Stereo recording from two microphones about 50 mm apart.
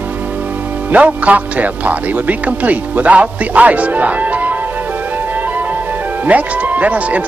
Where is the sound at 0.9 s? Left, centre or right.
Right.